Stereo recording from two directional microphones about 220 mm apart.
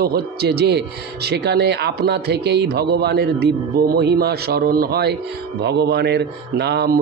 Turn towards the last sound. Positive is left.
turn(degrees=-50)  # may be behind; listen again after turning